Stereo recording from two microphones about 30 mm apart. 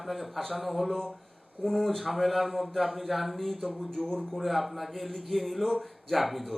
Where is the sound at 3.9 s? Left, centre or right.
Centre.